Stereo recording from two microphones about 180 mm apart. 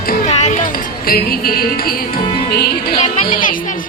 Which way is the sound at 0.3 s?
40° left (ahead or behind).